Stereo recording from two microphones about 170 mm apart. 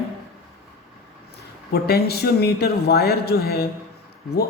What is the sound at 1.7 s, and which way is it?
A man's voice, 70° left (ahead or behind).